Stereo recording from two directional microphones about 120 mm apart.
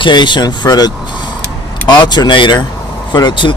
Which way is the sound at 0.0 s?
40° left (ahead or behind).